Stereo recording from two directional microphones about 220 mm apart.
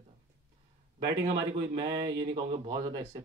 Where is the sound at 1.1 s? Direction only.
20° right (ahead or behind).